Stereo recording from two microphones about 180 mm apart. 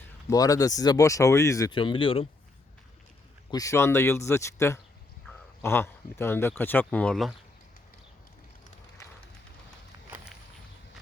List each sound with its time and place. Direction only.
0.3 s speech: 20° left (ahead or behind)
3.5 s speech: 15° left (ahead or behind); by 7.3 s centre (ahead or behind)